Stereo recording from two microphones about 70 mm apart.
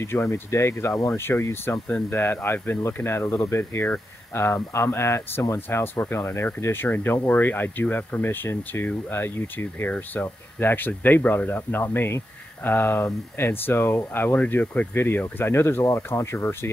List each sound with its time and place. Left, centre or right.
0.0 s speech: left